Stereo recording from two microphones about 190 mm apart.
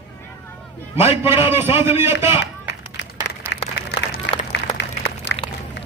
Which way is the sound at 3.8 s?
65° left (ahead or behind).